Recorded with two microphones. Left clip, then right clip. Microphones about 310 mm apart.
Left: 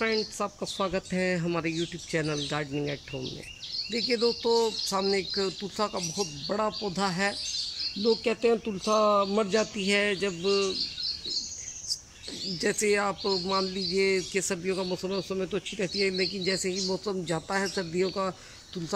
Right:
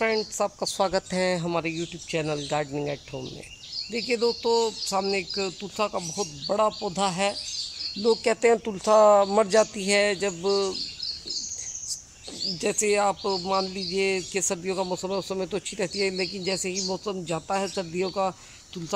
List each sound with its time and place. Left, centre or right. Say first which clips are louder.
0.0 s speech: right 4 dB; centre
3.9 s speech: right 2 dB; centre
12.5 s speech: right 2 dB; centre